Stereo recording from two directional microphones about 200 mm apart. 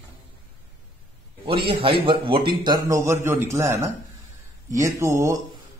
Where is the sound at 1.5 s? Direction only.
25° right (ahead or behind).